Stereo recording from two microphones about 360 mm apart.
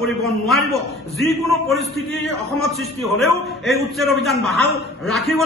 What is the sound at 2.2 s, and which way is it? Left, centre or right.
A man's voice, centre.